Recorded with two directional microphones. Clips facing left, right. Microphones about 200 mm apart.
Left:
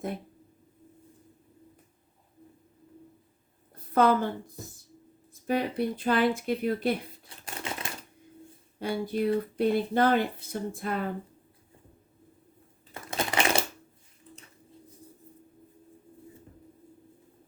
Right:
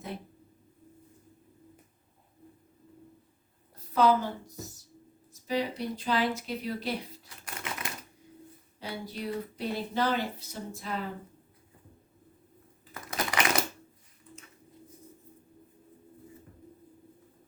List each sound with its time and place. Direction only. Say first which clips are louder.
3.9 s a woman's voice: left 2 dB; 55° left (ahead or behind)
7.3 s a sound: left 3 dB; 30° left (ahead or behind)
8.8 s speech: left 9 dB; 50° left (ahead or behind)
12.9 s crushing: left 2 dB; 25° left (ahead or behind)